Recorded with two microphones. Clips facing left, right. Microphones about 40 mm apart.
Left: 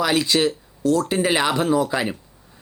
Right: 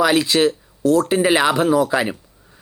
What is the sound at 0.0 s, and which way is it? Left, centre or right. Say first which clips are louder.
Speech: right 4 dB; centre.